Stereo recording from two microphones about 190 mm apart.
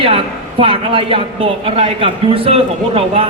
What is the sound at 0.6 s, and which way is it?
A man's voice, 30° right (ahead or behind).